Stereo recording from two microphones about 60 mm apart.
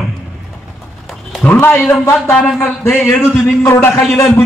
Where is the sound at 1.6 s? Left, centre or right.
Left.